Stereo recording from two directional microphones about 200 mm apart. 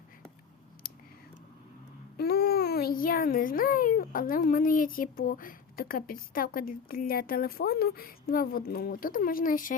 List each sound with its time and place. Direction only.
2.1 s a child's voice: 50° left (ahead or behind)